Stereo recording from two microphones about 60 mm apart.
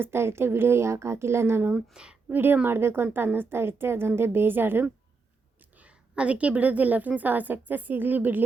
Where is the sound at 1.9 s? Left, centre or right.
Centre.